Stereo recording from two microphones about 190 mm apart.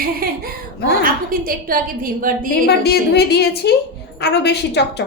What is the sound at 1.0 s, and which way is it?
A woman's voice, 50° right (ahead or behind).